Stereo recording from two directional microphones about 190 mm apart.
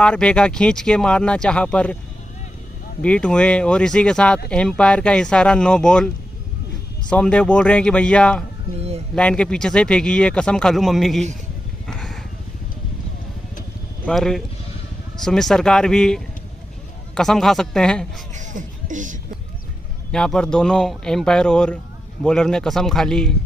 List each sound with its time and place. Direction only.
0.0 s speech: 5° left (ahead or behind)
3.0 s speech: 5° left (ahead or behind)
8.7 s speech: 35° right (ahead or behind)
9.1 s speech: 5° left (ahead or behind)
14.0 s speech: centre (ahead or behind)
18.3 s beatboxing: 40° right (ahead or behind)
20.1 s speech: 5° left (ahead or behind)